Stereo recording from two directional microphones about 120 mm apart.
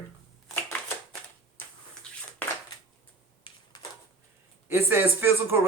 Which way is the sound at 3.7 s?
35° left (ahead or behind).